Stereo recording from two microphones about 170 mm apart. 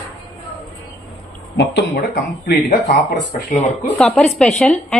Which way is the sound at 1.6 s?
65° left (ahead or behind).